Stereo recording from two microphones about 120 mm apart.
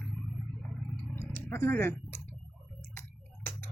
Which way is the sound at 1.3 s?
20° left (ahead or behind).